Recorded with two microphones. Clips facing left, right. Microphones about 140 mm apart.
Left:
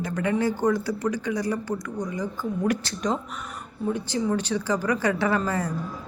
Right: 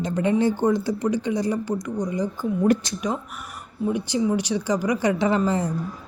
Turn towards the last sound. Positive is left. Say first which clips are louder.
# right 3 dB
turn(degrees=-20)  # may be behind; listen again after turning